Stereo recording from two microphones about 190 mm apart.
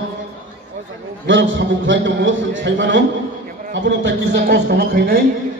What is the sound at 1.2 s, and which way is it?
A man's voice, 80° right.